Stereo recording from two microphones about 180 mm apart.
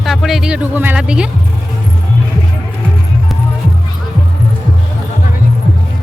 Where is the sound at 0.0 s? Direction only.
Centre (ahead or behind).